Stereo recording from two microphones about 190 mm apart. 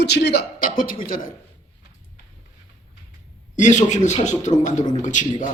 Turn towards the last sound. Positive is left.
turn(degrees=40)  # may be behind; listen again after turning